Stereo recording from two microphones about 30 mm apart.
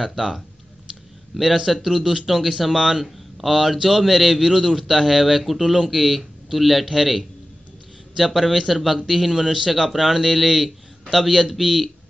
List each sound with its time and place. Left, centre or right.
0.0 s a man's voice: centre
2.7 s a man's voice: centre
3.3 s a man's voice: centre
9.3 s a man's voice: centre